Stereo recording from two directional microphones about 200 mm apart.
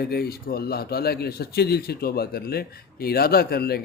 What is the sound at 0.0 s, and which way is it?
A man's voice, 50° left (ahead or behind).